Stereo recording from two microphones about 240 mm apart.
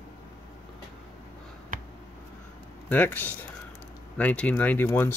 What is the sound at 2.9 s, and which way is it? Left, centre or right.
Speech, centre.